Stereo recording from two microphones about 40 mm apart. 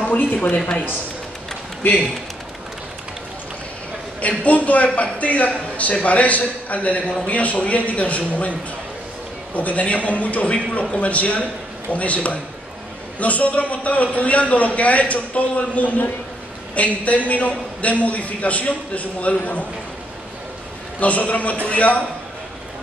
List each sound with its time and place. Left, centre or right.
0.1 s speech: left
4.2 s a man's voice: left
21.0 s a man's voice: left